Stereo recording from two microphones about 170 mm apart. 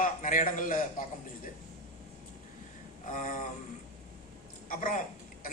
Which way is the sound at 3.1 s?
50° left (ahead or behind).